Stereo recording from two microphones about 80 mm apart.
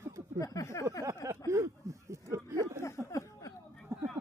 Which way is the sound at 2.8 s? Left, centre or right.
Left.